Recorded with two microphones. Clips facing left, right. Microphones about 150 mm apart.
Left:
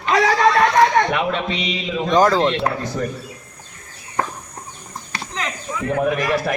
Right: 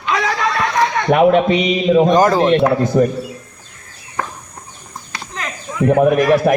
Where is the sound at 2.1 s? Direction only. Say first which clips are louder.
Right 3 dB; 10° right (ahead or behind).